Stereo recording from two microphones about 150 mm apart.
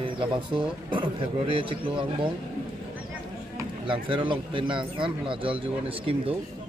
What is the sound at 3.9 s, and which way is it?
Speech, 35° right (ahead or behind).